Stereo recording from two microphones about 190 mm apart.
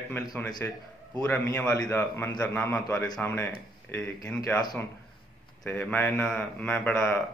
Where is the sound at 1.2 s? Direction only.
10° left (ahead or behind).